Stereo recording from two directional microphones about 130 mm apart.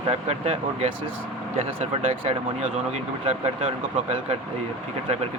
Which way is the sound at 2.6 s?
60° right (ahead or behind).